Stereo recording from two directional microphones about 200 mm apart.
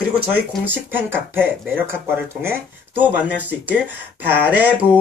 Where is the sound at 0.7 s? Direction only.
10° right (ahead or behind).